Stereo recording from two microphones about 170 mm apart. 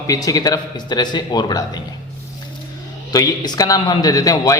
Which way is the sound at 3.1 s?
20° left (ahead or behind).